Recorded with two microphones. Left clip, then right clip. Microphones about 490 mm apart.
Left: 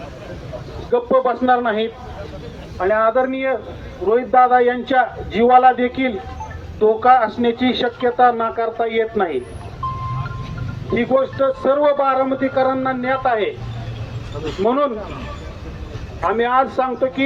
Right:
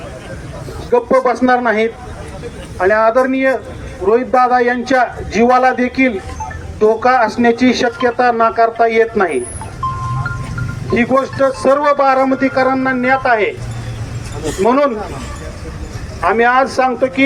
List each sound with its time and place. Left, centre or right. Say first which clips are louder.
0.9 s speech: right 4 dB; left
10.9 s speech: right 3 dB; left
16.3 s speech: right 5 dB; left